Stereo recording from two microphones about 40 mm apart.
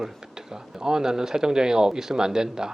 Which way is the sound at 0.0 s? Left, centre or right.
Centre.